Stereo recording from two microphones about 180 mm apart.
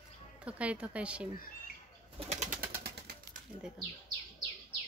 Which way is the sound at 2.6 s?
60° right (ahead or behind).